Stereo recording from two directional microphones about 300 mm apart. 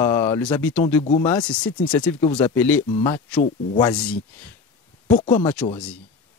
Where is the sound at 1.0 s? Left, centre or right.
Left.